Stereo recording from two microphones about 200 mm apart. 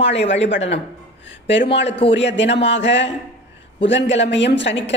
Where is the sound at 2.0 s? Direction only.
60° left (ahead or behind).